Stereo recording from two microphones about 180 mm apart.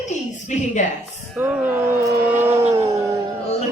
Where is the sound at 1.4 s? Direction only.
10° right (ahead or behind).